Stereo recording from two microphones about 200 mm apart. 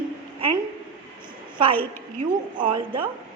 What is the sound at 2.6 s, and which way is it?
Speech, 25° right (ahead or behind).